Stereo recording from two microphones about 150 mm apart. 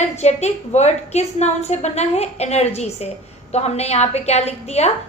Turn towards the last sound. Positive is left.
turn(degrees=45)  # may be behind; listen again after turning